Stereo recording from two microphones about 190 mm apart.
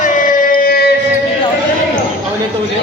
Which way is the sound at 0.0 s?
45° left (ahead or behind).